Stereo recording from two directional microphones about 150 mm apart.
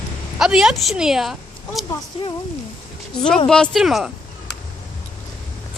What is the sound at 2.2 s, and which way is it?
Speech, 40° left (ahead or behind).